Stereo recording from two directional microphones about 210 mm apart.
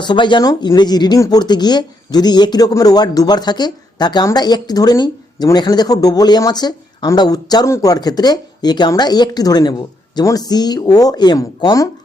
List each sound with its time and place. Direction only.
0.0 s speech: 20° left (ahead or behind)